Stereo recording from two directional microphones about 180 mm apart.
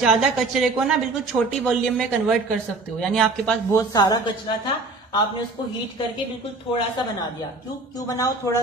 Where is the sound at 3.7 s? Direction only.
20° left (ahead or behind).